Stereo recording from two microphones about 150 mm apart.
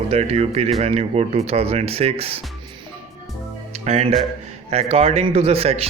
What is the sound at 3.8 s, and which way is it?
Speech, 45° right (ahead or behind).